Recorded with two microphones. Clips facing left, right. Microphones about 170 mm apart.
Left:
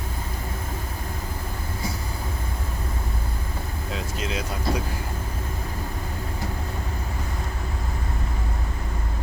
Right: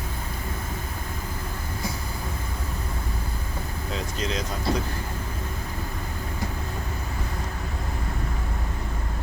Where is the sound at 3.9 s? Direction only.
5° left (ahead or behind).